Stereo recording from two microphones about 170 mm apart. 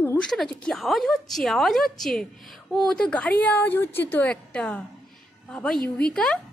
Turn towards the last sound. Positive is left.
turn(degrees=5)  # may be behind; listen again after turning